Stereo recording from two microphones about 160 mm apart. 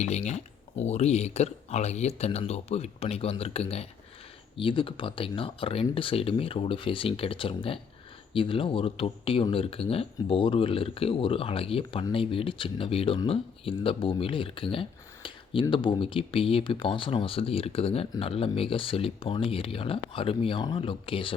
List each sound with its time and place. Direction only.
0.0 s speech: 45° left (ahead or behind)